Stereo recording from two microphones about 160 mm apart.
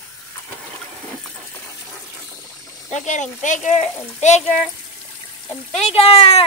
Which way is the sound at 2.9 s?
50° left (ahead or behind).